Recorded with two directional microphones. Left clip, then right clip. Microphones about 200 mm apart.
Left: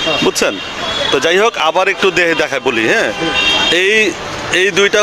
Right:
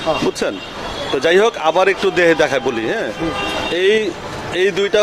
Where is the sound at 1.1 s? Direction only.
Centre (ahead or behind).